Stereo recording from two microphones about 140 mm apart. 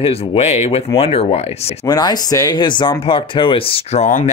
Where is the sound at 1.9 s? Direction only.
30° left (ahead or behind).